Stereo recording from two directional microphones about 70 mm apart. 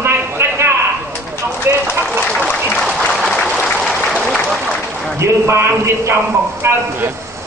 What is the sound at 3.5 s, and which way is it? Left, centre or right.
Applause, centre.